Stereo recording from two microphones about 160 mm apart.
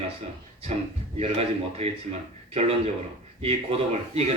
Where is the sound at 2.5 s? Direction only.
40° right (ahead or behind).